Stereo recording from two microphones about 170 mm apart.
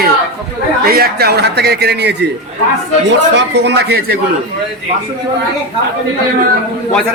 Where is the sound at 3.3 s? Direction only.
90° right; by 4.2 s 65° right (ahead or behind).